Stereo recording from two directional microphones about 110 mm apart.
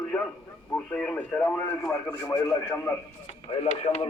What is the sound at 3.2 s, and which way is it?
Speech, 60° left (ahead or behind).